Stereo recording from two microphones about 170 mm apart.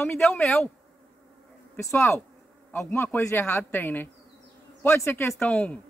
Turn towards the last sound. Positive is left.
turn(degrees=10)  # may be behind; listen again after turning